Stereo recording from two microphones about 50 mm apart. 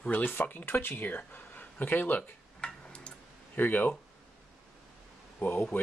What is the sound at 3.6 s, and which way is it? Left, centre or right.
Speech, left.